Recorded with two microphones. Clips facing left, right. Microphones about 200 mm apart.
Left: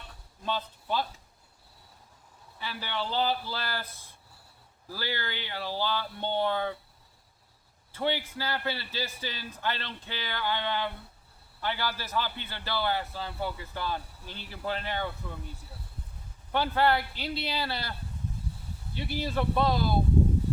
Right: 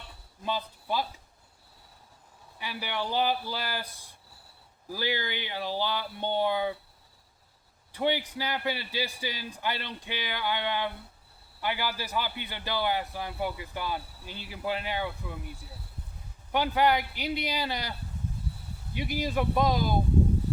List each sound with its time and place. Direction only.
0.4 s speech: 10° right (ahead or behind)
2.6 s a man's voice: 15° right (ahead or behind)
7.9 s a man's voice: 15° right (ahead or behind)
16.5 s a man's voice: 15° right (ahead or behind)
18.9 s a man's voice: 15° right (ahead or behind)